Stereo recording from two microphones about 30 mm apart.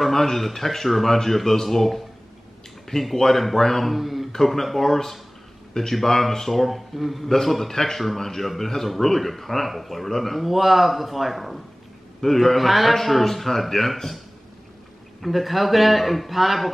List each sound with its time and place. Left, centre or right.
0.1 s speech: centre
4.7 s a man's voice: centre
10.4 s a man's voice: centre
15.2 s a man's voice: centre